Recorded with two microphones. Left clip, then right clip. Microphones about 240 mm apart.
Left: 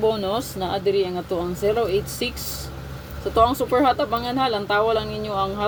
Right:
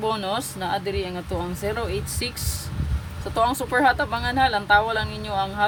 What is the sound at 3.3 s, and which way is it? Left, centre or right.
Speech, right.